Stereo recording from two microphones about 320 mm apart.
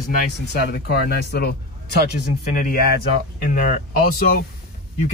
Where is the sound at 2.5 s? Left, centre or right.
Left.